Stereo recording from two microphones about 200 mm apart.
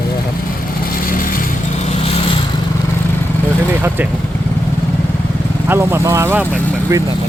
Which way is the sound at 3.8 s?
10° right (ahead or behind).